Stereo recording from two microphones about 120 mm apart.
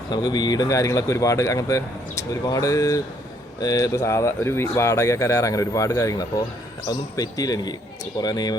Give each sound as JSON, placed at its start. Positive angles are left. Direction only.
{"t": 0.1, "sound": "speech", "side_deg": 35}